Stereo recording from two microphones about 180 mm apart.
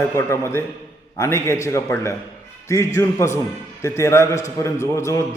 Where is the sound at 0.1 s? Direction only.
15° left (ahead or behind).